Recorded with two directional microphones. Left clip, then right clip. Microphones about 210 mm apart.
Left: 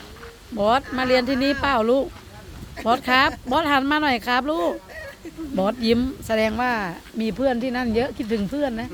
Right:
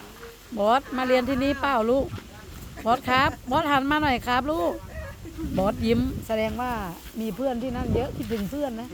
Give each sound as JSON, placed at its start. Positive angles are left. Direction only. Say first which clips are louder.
{"t": 0.5, "sound": "speech", "louder": "left 2 dB", "side_deg": 0}